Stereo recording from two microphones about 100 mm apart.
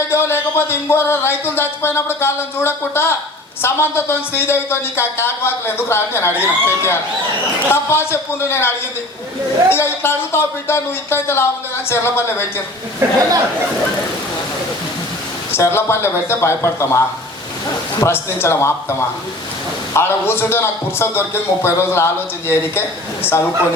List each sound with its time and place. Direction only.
0.1 s speech: 25° left (ahead or behind)
13.0 s speech: 25° right (ahead or behind)
15.5 s speech: 25° left (ahead or behind)
18.0 s speech: 25° left (ahead or behind)